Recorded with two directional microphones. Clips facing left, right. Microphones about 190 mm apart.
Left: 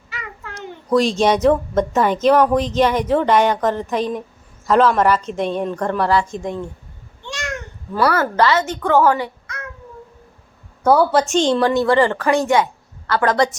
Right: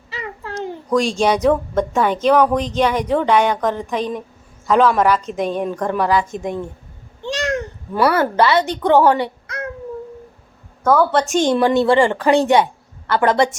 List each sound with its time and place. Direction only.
0.1 s a sound: 30° right (ahead or behind)
0.9 s a woman's voice: 5° left (ahead or behind)
6.1 s speech: 15° right (ahead or behind)
7.3 s babbling: 35° right (ahead or behind)
7.9 s a woman's voice: 25° right (ahead or behind)
8.4 s a child's voice: 15° right (ahead or behind); by 9.6 s 30° right (ahead or behind)
10.8 s a woman's voice: 10° left (ahead or behind)
11.4 s a woman's voice: 20° right (ahead or behind)
12.3 s a woman's voice: 30° right (ahead or behind)